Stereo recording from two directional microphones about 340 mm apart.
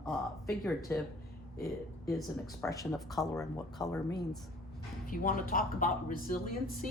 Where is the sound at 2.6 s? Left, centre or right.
Centre.